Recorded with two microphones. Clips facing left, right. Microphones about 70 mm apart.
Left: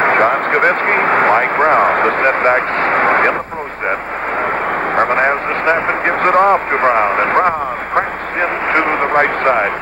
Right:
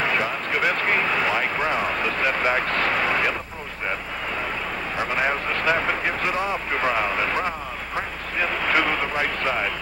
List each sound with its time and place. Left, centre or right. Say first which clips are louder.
0.0 s a sound: left 12 dB; left
4.9 s speech: left 10 dB; left
6.2 s speech: left 14 dB; left